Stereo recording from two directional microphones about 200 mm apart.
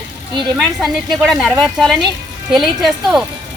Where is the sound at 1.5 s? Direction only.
20° right (ahead or behind).